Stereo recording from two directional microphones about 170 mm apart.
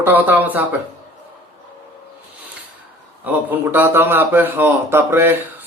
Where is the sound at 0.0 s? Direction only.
10° right (ahead or behind).